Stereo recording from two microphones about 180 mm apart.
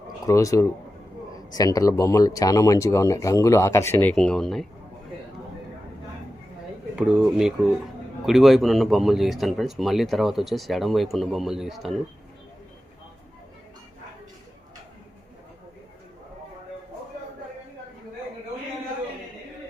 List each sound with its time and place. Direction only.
0.3 s speech: 20° left (ahead or behind)
4.1 s speech: 5° left (ahead or behind)
6.9 s speech: 5° right (ahead or behind)